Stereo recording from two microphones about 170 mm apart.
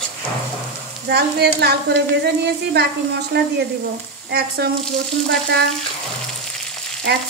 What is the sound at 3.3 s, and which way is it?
Speech, 80° right.